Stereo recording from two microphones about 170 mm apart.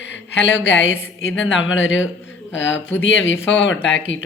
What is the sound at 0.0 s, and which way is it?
A woman's voice, 90° left.